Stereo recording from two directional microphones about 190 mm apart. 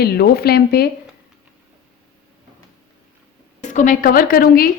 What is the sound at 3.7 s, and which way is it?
Speech, 45° left (ahead or behind).